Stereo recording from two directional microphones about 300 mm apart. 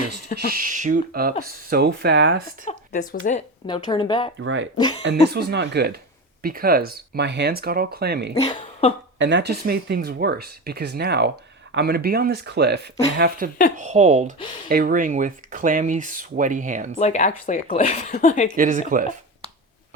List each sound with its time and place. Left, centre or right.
0.5 s speech: right
2.7 s a woman's voice: left
4.4 s speech: right
8.4 s speech: centre
9.1 s speech: right
17.0 s speech: left
18.5 s speech: right